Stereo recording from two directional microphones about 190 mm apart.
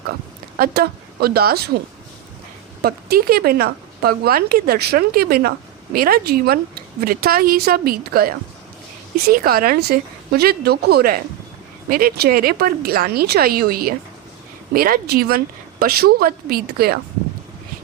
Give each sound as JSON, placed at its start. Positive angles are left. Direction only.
{"t": 0.6, "sound": "speech", "side_deg": -55}
{"t": 2.8, "sound": "speech", "side_deg": -50}